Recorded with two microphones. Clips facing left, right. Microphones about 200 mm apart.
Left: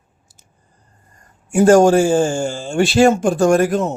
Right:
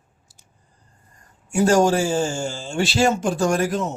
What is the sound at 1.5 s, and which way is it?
A man's voice, 50° left (ahead or behind).